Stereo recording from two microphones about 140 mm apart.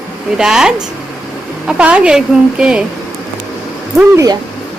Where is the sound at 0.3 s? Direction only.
5° right (ahead or behind).